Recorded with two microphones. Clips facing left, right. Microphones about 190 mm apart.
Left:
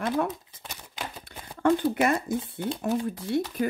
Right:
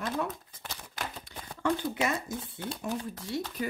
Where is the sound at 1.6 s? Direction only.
55° left (ahead or behind).